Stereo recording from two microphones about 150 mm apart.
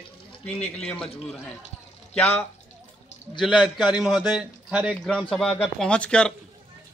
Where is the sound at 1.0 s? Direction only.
40° left (ahead or behind).